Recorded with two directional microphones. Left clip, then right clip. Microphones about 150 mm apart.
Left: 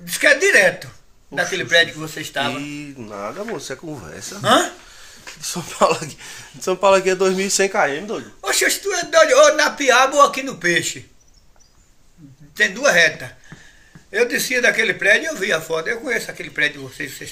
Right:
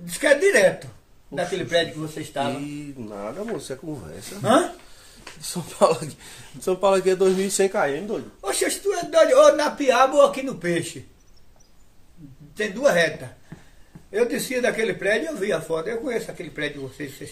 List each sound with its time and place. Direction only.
0.0 s speech: 25° right (ahead or behind)
2.5 s speech: 10° left (ahead or behind)
4.4 s speech: 20° right (ahead or behind)
5.4 s speech: 10° left (ahead or behind)
8.4 s speech: 25° right (ahead or behind)
12.5 s speech: 25° right (ahead or behind)